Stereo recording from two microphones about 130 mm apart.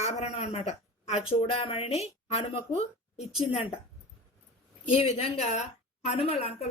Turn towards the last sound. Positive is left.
turn(degrees=50)  # may be behind; listen again after turning